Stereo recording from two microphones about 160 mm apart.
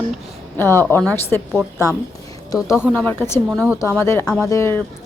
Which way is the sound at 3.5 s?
Centre (ahead or behind).